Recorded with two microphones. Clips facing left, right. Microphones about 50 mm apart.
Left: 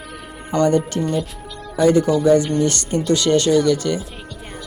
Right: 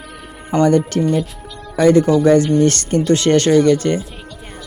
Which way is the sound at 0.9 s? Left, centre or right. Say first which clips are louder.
Right 4 dB; right.